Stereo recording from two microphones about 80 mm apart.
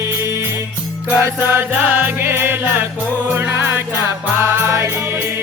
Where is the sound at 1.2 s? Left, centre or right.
Right.